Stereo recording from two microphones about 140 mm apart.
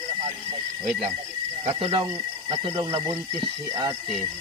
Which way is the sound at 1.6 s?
40° right (ahead or behind).